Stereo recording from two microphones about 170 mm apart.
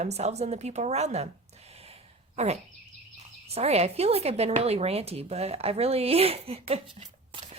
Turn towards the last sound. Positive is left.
turn(degrees=-35)  # may be behind; listen again after turning